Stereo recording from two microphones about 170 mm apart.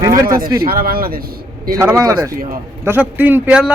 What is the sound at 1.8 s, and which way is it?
Speech, 15° right (ahead or behind).